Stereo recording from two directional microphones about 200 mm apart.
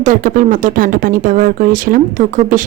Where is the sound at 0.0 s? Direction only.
40° right (ahead or behind).